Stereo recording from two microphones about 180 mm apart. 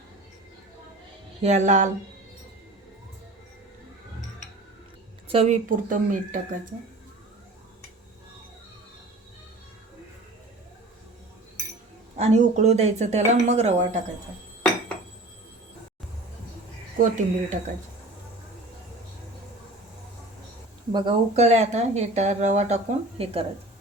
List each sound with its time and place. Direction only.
1.4 s speech: 40° right (ahead or behind)
5.3 s a woman's voice: 35° right (ahead or behind)
5.6 s speech: 45° right (ahead or behind)
12.1 s speech: 40° right (ahead or behind)
17.0 s speech: 45° right (ahead or behind)
20.9 s speech: 25° right (ahead or behind)